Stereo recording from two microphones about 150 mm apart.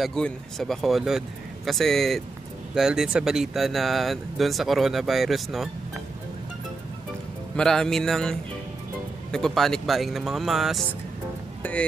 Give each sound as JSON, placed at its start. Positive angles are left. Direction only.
{"t": 0.0, "sound": "speech", "side_deg": 5}
{"t": 7.5, "sound": "speech", "side_deg": 5}
{"t": 11.6, "sound": "speech", "side_deg": 10}